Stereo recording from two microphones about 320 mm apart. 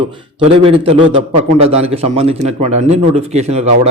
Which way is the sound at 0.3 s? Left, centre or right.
Centre.